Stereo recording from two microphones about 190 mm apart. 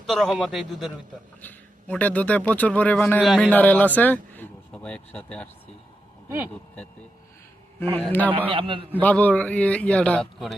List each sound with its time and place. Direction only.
0.0 s a man's voice: centre (ahead or behind)
3.2 s a man's voice: centre (ahead or behind)
6.2 s speech: 10° right (ahead or behind)
7.9 s speech: 10° left (ahead or behind)
8.4 s a man's voice: 25° right (ahead or behind)
8.9 s speech: 10° left (ahead or behind)